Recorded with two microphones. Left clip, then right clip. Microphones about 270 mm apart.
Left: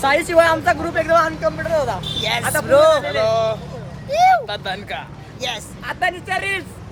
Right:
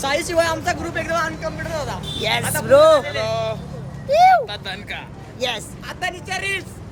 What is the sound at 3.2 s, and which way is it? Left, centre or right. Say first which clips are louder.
Speech: left 5 dB; centre.